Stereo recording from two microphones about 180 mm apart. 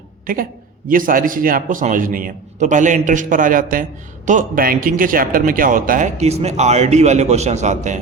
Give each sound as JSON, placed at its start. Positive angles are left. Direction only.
{"t": 0.9, "sound": "a man's voice", "side_deg": -50}